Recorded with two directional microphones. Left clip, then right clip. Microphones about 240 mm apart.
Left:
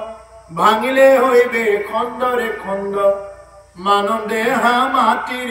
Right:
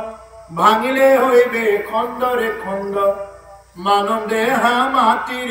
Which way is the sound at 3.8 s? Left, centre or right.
Centre.